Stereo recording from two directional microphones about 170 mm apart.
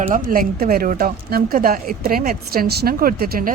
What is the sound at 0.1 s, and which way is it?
A woman's voice, 55° right (ahead or behind).